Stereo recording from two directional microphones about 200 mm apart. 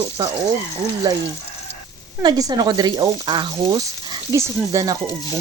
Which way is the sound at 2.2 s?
20° right (ahead or behind).